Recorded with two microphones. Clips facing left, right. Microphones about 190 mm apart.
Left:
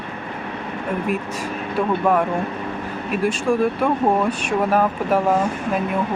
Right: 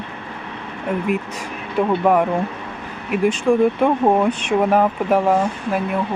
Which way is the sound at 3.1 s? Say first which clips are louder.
Right 3 dB; 20° right (ahead or behind).